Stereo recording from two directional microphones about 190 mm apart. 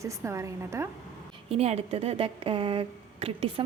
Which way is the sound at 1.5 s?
35° right (ahead or behind).